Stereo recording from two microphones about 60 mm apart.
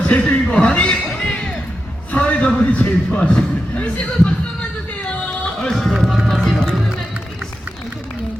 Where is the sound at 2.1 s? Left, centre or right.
Left; by 5.9 s centre.